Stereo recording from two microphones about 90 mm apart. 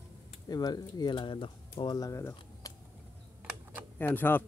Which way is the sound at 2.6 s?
40° left (ahead or behind).